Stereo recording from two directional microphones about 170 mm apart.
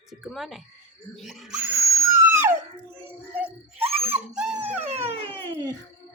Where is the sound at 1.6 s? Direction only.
15° right (ahead or behind).